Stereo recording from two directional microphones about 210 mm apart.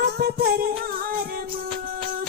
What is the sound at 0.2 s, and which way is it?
Music, 45° right (ahead or behind).